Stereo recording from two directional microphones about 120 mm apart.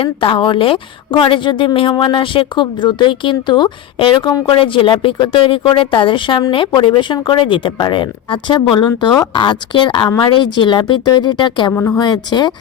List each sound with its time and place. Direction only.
0.0 s a woman's voice: 45° left (ahead or behind)
11.7 s speech: 15° left (ahead or behind)
11.9 s speech: 35° left (ahead or behind)